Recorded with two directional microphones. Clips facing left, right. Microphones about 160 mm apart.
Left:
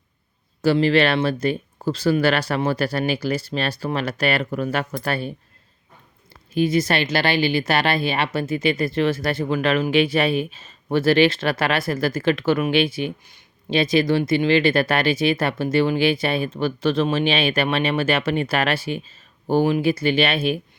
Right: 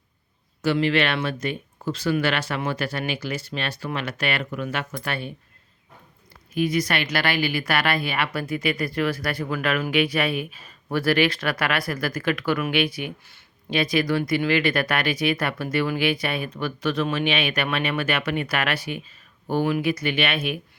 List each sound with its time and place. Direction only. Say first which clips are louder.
0.6 s speech: left 4 dB; 35° left (ahead or behind)
6.5 s speech: left 4 dB; 30° left (ahead or behind)